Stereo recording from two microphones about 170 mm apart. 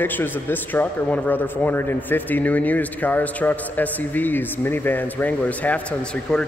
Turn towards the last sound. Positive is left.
turn(degrees=5)  # may be behind; listen again after turning